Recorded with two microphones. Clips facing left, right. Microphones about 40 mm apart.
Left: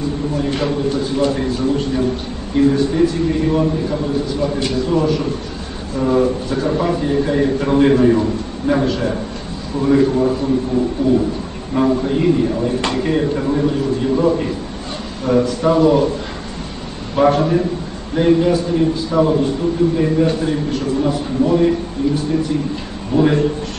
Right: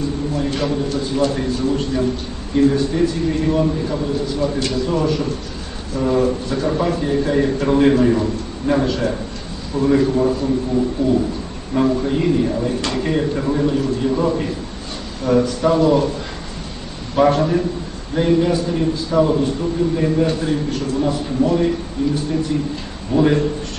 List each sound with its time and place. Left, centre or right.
0.4 s a man's voice: centre
11.0 s speech: centre
11.7 s a man's voice: centre
17.1 s a man's voice: centre
23.1 s a man's voice: centre